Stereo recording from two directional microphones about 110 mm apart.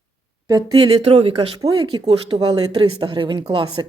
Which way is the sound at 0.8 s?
60° right (ahead or behind).